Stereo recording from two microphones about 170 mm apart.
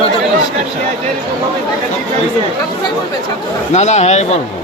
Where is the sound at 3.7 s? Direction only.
40° left (ahead or behind).